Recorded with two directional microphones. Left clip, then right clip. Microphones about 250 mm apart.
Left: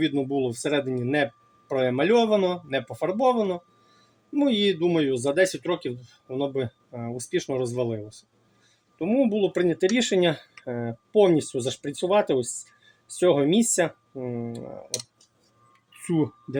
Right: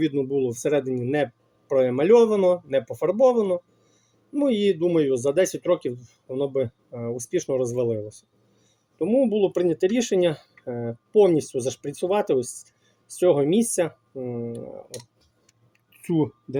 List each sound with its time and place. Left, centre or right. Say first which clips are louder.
0.0 s speech: right 2 dB; centre
9.0 s speech: right 2 dB; centre
16.0 s speech: right 2 dB; centre